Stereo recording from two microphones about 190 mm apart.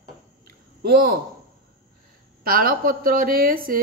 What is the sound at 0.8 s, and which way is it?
Speech, 50° right (ahead or behind).